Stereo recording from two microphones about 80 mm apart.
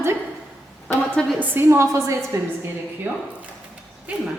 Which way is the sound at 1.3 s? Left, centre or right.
Right.